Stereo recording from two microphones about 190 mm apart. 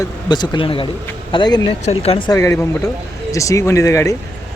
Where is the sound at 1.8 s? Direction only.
35° left (ahead or behind).